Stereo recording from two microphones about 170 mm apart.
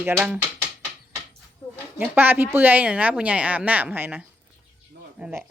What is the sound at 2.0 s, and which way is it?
Speech, 10° right (ahead or behind).